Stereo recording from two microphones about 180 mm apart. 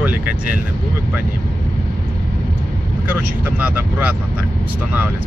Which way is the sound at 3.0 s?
10° right (ahead or behind).